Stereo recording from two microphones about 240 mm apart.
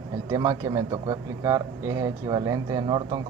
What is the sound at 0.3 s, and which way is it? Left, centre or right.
Speech, centre.